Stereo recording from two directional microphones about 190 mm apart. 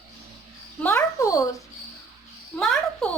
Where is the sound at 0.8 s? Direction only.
10° left (ahead or behind).